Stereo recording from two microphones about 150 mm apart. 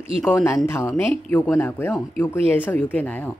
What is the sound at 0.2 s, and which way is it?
Speech, 15° left (ahead or behind).